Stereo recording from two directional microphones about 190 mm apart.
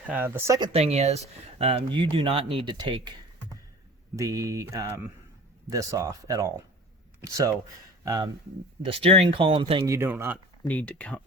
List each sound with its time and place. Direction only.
0.0 s speech: 10° right (ahead or behind)
0.7 s speech: 35° right (ahead or behind)
4.1 s speech: 15° right (ahead or behind)
10.7 s speech: 5° left (ahead or behind)